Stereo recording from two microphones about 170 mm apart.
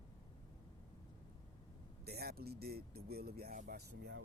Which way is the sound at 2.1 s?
65° right (ahead or behind).